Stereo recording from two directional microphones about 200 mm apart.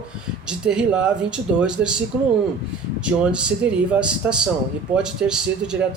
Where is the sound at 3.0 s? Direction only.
5° right (ahead or behind).